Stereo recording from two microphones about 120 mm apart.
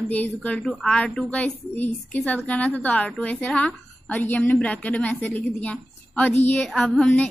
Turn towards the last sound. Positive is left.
turn(degrees=10)  # may be behind; listen again after turning